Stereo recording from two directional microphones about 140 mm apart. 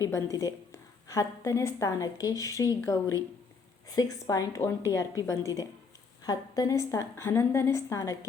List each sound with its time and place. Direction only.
0.0 s a woman's voice: 20° left (ahead or behind)